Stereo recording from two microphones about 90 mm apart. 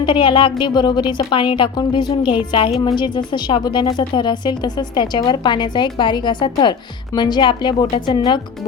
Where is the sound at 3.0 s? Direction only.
60° left (ahead or behind).